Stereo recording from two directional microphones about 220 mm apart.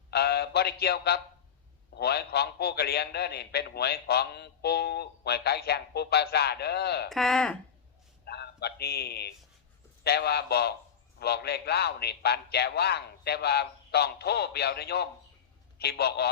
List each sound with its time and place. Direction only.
0.1 s a sound: 45° left (ahead or behind)
2.0 s a man's voice: 45° left (ahead or behind)
7.1 s speech: centre (ahead or behind)
8.2 s a man's voice: 50° left (ahead or behind)